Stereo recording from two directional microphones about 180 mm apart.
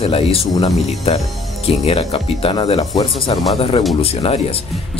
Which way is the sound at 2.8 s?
35° left (ahead or behind).